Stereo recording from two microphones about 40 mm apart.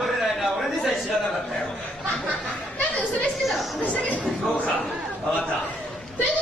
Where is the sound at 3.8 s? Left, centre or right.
Left.